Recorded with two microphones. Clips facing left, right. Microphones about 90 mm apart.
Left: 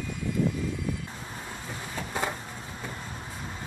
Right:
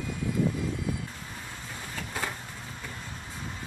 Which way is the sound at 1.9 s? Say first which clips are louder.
Left 4 dB; 20° left (ahead or behind).